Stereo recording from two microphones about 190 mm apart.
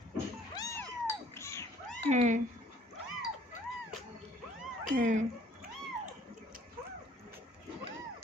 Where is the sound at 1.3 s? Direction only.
15° left (ahead or behind).